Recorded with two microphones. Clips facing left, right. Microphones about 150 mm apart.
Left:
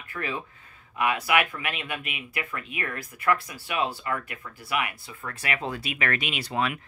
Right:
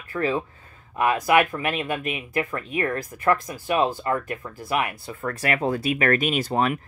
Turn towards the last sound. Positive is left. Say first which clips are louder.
# right 6 dB
turn(degrees=-40)  # may be behind; listen again after turning